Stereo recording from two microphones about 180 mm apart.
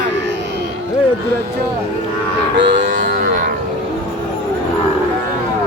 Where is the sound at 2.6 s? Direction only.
80° right.